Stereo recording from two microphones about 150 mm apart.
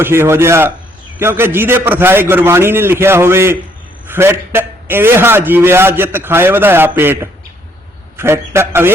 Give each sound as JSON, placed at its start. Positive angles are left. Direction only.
{"t": 0.0, "sound": "a man's voice", "side_deg": -15}